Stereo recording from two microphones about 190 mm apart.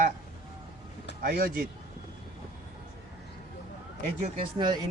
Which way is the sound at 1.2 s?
55° right (ahead or behind).